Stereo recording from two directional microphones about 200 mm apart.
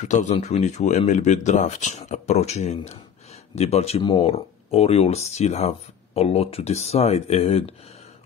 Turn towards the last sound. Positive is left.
turn(degrees=30)  # may be behind; listen again after turning